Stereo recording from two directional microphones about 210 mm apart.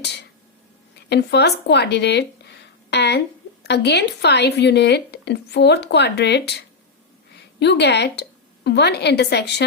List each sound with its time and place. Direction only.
0.9 s speech: 55° left (ahead or behind)
7.6 s a woman's voice: 55° left (ahead or behind)